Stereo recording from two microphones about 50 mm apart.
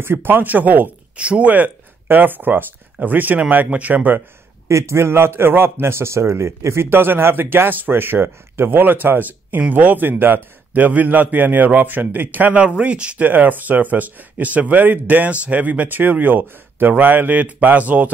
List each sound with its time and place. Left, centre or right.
0.0 s a man's voice: right
1.1 s speech: right
1.5 s a man's voice: right
4.6 s a man's voice: right
13.2 s a man's voice: right